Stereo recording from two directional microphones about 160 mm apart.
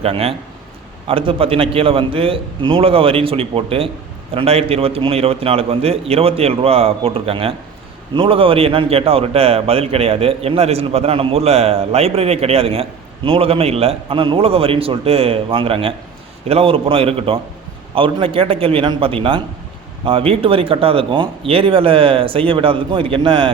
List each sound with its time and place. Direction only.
0.0 s a man's voice: 40° right (ahead or behind)